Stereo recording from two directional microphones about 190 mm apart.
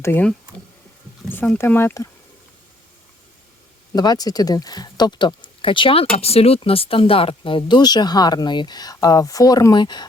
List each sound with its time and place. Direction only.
0.0 s speech: 10° left (ahead or behind)
3.9 s speech: 20° left (ahead or behind)